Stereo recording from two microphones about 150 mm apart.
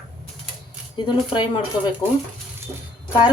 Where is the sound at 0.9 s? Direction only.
35° left (ahead or behind).